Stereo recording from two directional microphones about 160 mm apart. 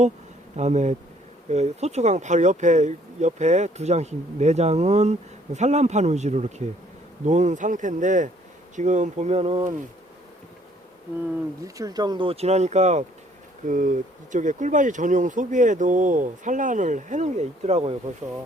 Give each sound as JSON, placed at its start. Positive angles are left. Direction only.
{"t": 0.5, "sound": "speech", "side_deg": -45}
{"t": 11.6, "sound": "speech", "side_deg": -20}